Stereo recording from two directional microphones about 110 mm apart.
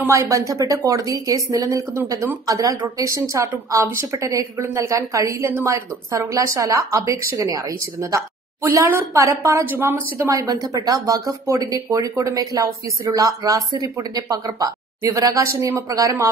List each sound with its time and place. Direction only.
0.0 s a woman's voice: 25° right (ahead or behind)